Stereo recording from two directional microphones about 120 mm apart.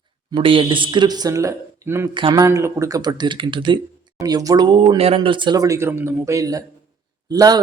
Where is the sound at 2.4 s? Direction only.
25° right (ahead or behind).